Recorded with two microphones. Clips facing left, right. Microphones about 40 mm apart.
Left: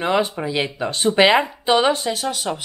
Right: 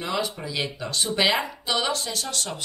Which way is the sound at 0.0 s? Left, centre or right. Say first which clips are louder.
Left 8 dB; left.